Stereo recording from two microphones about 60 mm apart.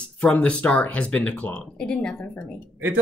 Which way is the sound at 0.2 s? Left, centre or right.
Centre.